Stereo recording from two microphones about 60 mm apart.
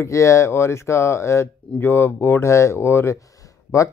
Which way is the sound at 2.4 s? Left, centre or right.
Left.